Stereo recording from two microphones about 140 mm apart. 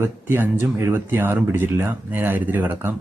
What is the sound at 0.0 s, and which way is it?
Speech, 15° right (ahead or behind).